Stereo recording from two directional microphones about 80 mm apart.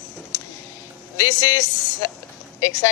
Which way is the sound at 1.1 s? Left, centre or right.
Left.